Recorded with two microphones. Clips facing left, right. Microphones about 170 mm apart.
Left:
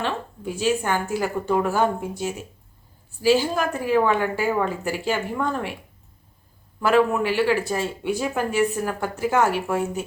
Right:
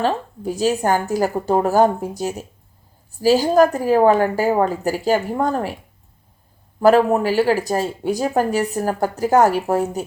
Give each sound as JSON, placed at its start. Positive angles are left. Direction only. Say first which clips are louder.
{"t": 0.0, "sound": "speech", "louder": "right 6 dB", "side_deg": -40}
{"t": 6.7, "sound": "speech", "louder": "right 5 dB", "side_deg": -40}